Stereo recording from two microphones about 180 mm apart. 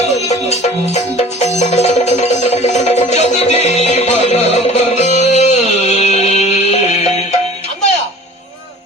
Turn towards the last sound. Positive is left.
turn(degrees=35)  # may be behind; listen again after turning